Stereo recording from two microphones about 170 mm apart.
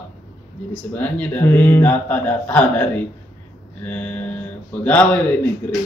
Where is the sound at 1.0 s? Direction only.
10° left (ahead or behind).